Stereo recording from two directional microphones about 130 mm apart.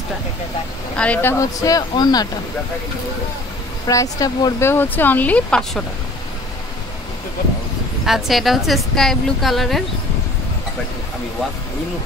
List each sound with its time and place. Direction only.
0.9 s speech: 10° left (ahead or behind)
1.4 s speech: 25° left (ahead or behind)
3.8 s speech: 25° left (ahead or behind)
4.6 s speech: 15° left (ahead or behind)
8.0 s a woman's voice: centre (ahead or behind)